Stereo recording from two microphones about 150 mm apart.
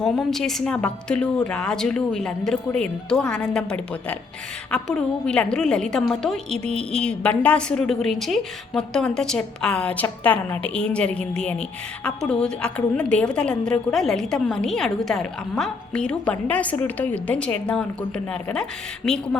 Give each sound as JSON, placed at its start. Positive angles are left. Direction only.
{"t": 0.0, "sound": "a woman's voice", "side_deg": 0}